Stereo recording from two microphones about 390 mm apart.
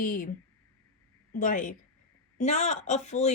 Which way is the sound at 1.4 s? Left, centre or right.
Centre.